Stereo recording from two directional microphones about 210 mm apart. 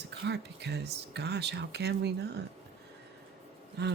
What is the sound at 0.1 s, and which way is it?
Speech, 55° right (ahead or behind).